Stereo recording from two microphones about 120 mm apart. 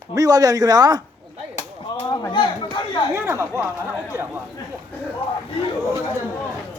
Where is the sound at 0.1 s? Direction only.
30° right (ahead or behind).